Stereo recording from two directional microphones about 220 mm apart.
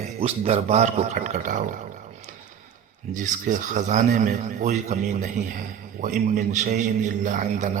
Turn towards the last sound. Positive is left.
turn(degrees=-35)  # may be behind; listen again after turning